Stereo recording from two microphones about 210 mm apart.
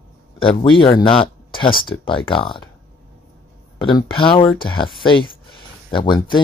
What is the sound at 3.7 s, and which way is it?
Speech, 20° left (ahead or behind).